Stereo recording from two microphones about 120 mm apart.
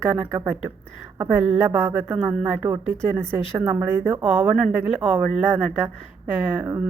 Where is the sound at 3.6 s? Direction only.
20° right (ahead or behind).